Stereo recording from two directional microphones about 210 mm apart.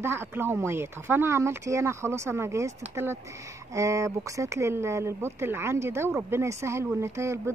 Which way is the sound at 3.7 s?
15° right (ahead or behind).